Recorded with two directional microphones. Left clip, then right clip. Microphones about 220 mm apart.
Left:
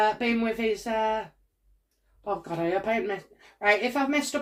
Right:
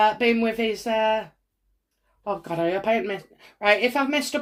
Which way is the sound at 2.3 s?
25° right (ahead or behind).